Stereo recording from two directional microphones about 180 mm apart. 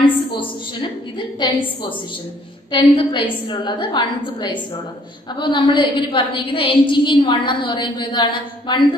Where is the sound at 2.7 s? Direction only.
25° left (ahead or behind).